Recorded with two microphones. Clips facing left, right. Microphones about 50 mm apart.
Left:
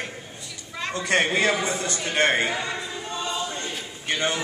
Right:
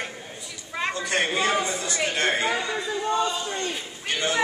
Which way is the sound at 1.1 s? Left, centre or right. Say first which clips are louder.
Left 4 dB; left.